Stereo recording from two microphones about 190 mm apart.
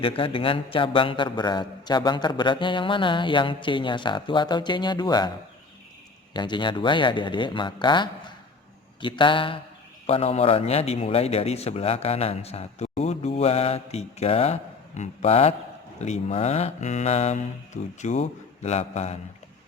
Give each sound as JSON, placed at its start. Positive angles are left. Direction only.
{"t": 0.0, "sound": "a man's voice", "side_deg": 30}
{"t": 6.3, "sound": "a man's voice", "side_deg": 25}